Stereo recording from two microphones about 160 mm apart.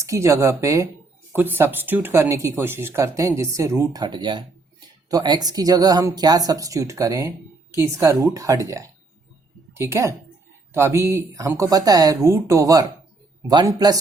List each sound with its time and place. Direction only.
0.0 s speech: 20° right (ahead or behind)